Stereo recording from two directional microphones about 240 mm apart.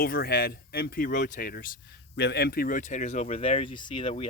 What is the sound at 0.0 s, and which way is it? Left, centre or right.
Speech, left.